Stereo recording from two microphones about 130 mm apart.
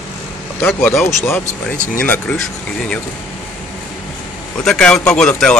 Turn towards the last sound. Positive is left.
turn(degrees=5)  # may be behind; listen again after turning